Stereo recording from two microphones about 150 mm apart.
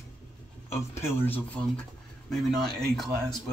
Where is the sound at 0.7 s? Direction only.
15° left (ahead or behind).